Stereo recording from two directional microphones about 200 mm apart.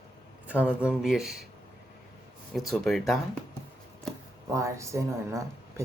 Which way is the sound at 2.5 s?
Centre (ahead or behind).